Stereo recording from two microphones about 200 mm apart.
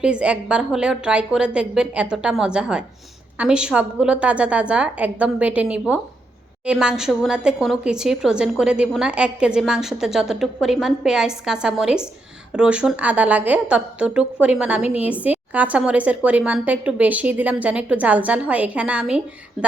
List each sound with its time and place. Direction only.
0.0 s a woman's voice: 5° right (ahead or behind)